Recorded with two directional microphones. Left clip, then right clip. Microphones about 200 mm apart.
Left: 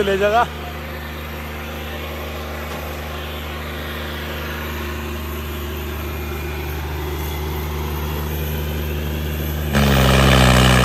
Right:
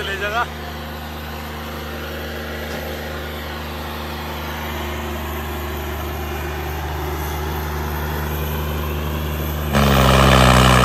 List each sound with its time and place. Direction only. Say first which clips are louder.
0.1 s speech: left 5 dB; centre (ahead or behind)
9.7 s vehicle: right 2 dB; centre (ahead or behind)